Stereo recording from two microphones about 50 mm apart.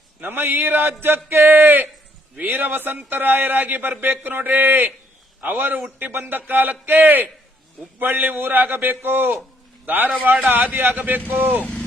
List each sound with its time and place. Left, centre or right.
0.2 s a man's voice: right